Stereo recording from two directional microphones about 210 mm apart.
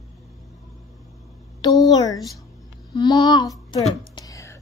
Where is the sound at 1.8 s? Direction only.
20° left (ahead or behind).